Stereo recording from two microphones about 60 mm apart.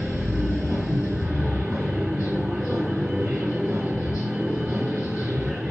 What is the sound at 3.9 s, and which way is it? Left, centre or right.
Music, centre.